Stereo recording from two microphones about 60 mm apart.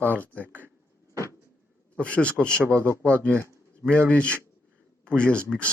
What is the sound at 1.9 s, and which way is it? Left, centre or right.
Speech, left.